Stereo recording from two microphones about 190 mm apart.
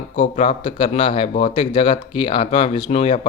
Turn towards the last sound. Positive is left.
turn(degrees=30)  # may be behind; listen again after turning